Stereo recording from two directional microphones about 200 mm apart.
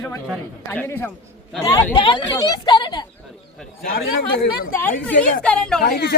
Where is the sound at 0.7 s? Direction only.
10° left (ahead or behind).